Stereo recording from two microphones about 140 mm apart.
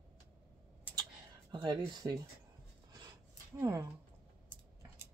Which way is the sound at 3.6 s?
20° right (ahead or behind).